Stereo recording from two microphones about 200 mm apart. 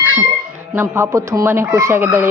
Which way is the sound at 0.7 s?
10° right (ahead or behind).